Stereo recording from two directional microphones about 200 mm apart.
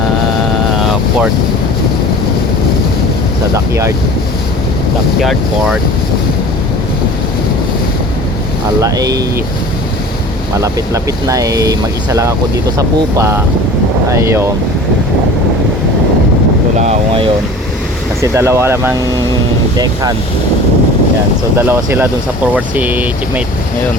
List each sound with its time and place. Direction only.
3.5 s speech: 15° right (ahead or behind)
5.2 s speech: centre (ahead or behind)
8.8 s speech: 20° right (ahead or behind)
10.6 s speech: 15° right (ahead or behind)
16.7 s speech: 30° right (ahead or behind)
18.2 s speech: 15° right (ahead or behind)
21.7 s speech: 10° right (ahead or behind)